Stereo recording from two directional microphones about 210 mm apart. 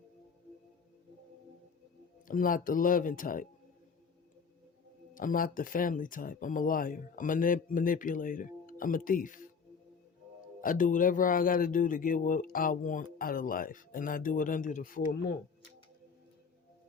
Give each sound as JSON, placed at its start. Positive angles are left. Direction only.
{"t": 2.2, "sound": "speech", "side_deg": 40}
{"t": 5.1, "sound": "speech", "side_deg": 40}
{"t": 10.6, "sound": "speech", "side_deg": 40}